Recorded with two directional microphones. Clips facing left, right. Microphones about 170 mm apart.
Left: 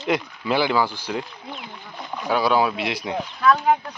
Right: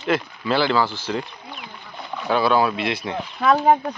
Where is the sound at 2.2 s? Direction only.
10° left (ahead or behind).